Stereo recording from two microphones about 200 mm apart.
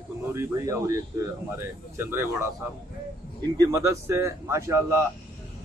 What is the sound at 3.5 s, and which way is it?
A man's voice, 15° right (ahead or behind).